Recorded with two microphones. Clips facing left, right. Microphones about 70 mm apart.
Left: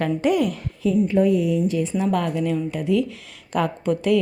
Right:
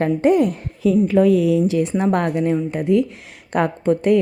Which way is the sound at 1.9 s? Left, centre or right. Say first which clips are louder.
Right 3 dB; right.